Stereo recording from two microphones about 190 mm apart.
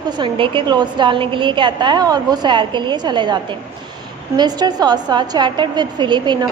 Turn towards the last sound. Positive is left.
turn(degrees=-25)  # may be behind; listen again after turning